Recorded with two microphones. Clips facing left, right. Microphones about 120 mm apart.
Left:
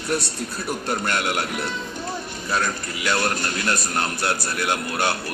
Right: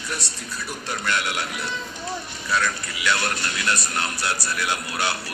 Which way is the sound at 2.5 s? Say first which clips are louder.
Even; 45° left (ahead or behind).